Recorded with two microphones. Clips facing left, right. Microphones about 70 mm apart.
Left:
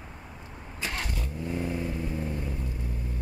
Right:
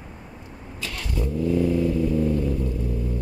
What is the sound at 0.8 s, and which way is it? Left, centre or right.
Vehicle, left.